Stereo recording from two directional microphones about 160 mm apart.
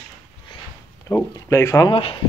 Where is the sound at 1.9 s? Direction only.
35° left (ahead or behind).